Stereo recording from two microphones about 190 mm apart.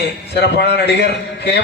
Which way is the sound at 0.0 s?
65° left (ahead or behind).